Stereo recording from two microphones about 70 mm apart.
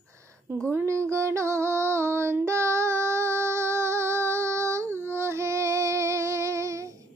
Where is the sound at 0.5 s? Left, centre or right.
Right.